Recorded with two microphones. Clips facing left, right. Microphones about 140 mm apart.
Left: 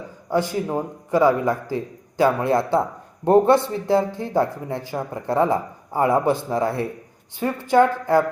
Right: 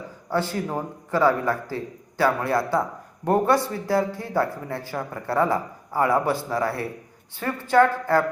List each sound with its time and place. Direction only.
0.3 s a man's voice: 15° left (ahead or behind)